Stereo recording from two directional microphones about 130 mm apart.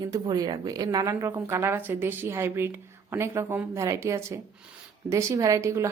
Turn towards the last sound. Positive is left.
turn(degrees=-20)  # may be behind; listen again after turning